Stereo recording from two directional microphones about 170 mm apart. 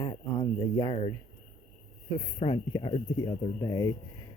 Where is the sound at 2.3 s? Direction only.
30° left (ahead or behind).